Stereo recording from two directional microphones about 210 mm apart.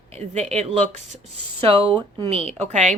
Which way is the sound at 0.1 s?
30° right (ahead or behind).